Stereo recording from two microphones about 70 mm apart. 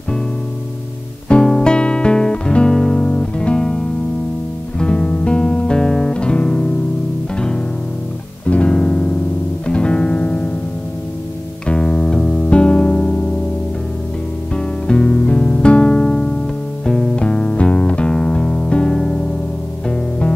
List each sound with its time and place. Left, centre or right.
1.3 s music: centre
11.6 s music: centre
14.5 s music: centre